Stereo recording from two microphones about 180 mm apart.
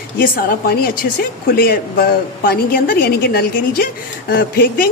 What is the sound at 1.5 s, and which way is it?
A woman's voice, 60° left (ahead or behind).